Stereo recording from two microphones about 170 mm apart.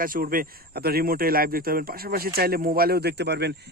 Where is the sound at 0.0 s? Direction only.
55° right (ahead or behind).